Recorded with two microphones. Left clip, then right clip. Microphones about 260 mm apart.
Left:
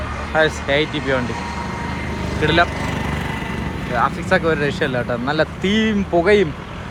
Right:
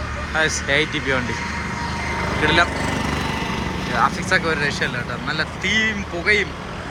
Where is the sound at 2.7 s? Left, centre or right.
Right.